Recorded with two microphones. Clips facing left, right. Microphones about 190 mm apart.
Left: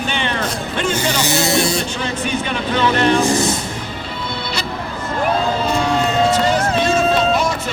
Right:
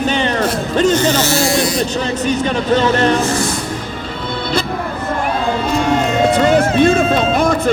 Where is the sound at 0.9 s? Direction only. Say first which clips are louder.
Right 5 dB; 10° left (ahead or behind).